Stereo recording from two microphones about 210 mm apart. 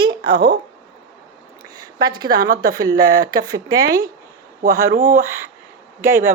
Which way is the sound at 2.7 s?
15° right (ahead or behind).